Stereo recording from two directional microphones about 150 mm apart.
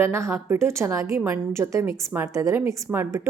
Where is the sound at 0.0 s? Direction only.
15° right (ahead or behind).